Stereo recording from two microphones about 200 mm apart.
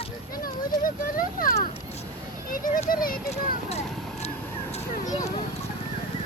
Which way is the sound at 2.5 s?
40° left (ahead or behind).